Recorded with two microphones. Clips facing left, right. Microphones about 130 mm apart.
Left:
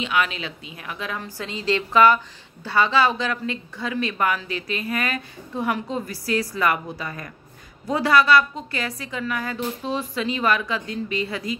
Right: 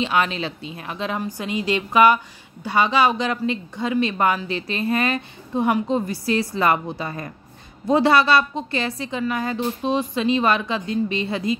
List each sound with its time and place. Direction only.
0.0 s speech: 35° right (ahead or behind)